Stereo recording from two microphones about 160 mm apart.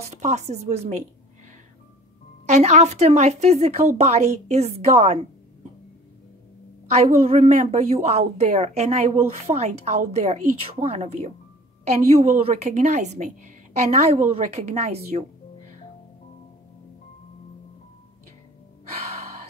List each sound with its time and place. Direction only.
0.2 s a woman's voice: 45° right (ahead or behind)
2.4 s a woman's voice: 45° right (ahead or behind)
6.9 s a woman's voice: 40° right (ahead or behind)